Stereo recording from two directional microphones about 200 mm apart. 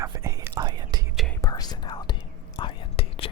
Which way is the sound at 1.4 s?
20° left (ahead or behind).